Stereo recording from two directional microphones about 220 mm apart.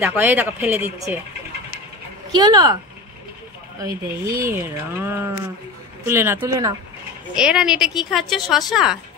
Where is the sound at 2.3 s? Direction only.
15° right (ahead or behind).